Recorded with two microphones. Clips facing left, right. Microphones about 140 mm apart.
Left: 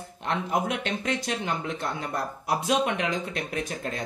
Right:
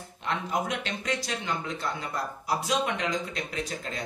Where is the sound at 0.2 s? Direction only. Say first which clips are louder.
Left 3 dB; 55° left (ahead or behind).